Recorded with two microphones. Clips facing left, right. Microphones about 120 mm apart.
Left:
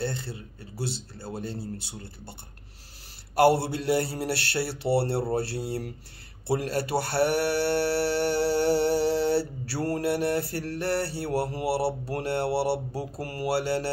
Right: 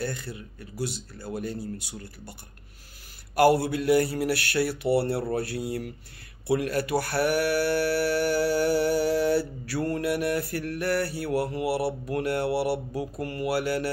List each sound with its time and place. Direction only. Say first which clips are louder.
0.0 s speech: left 1 dB; 30° left (ahead or behind)
3.3 s speech: right 1 dB; 30° left (ahead or behind)